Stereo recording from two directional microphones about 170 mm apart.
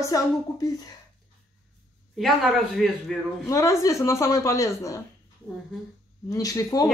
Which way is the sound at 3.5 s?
20° left (ahead or behind).